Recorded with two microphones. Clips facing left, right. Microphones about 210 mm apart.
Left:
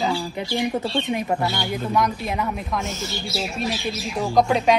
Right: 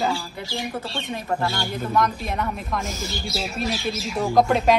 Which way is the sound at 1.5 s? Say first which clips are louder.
Left 2 dB; centre (ahead or behind).